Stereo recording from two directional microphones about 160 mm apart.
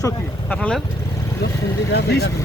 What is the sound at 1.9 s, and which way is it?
Speech, 90° left.